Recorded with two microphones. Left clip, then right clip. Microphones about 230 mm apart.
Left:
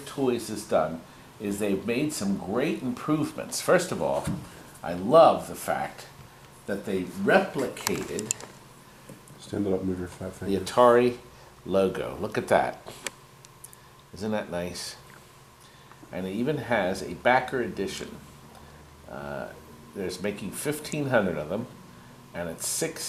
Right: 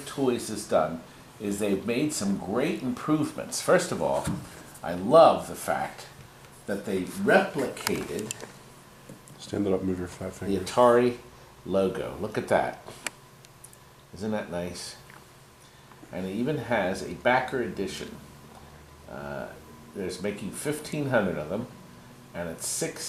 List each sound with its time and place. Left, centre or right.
0.3 s speech: centre
9.6 s speech: centre
10.4 s speech: centre
14.2 s speech: centre
16.1 s speech: centre
19.1 s speech: centre